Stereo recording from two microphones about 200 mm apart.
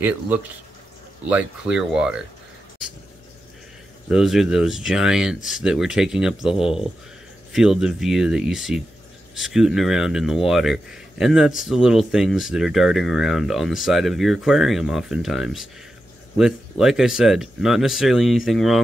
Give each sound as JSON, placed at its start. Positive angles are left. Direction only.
{"t": 1.3, "sound": "speech", "side_deg": -5}
{"t": 4.1, "sound": "speech", "side_deg": 0}
{"t": 6.5, "sound": "speech", "side_deg": 30}
{"t": 7.5, "sound": "speech", "side_deg": 0}